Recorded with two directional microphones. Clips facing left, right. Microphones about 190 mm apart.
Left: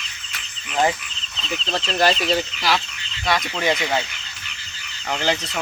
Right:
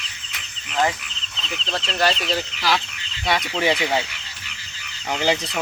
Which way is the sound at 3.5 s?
10° right (ahead or behind).